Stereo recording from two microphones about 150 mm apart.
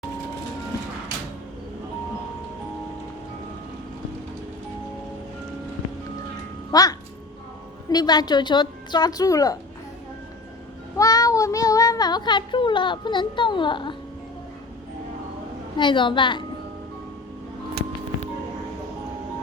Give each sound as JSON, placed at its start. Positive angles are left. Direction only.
{"t": 6.7, "sound": "speech", "side_deg": 25}
{"t": 10.9, "sound": "speech", "side_deg": 25}
{"t": 15.8, "sound": "a woman's voice", "side_deg": 30}